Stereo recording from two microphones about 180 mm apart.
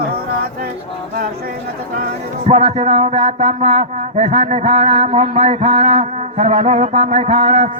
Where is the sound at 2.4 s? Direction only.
35° right (ahead or behind).